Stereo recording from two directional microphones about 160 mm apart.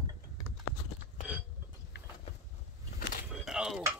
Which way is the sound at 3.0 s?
65° left (ahead or behind).